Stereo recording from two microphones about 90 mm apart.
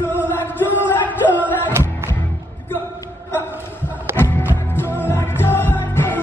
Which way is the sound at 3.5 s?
20° right (ahead or behind).